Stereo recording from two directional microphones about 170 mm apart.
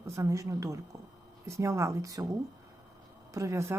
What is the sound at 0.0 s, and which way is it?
A woman's voice, 20° right (ahead or behind).